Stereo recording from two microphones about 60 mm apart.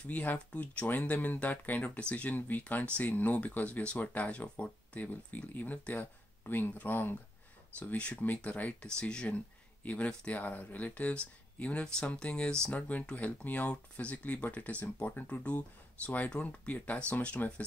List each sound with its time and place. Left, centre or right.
0.0 s speech: left
8.8 s speech: centre
13.1 s speech: left